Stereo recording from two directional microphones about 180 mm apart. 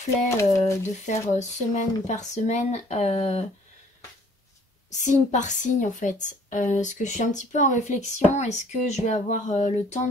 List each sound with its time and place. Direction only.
0.3 s speech: 15° left (ahead or behind)
1.0 s speech: 40° left (ahead or behind)
4.9 s a woman's voice: 40° left (ahead or behind)